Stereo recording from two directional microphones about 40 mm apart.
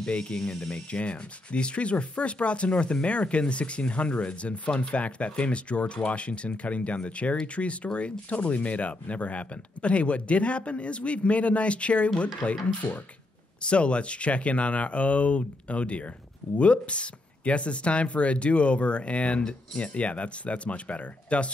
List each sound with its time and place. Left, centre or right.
0.0 s speech: left
13.6 s speech: left